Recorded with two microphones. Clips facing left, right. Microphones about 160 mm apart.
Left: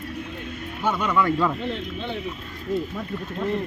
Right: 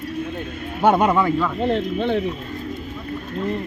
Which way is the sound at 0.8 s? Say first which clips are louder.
Right 6 dB; 55° right (ahead or behind).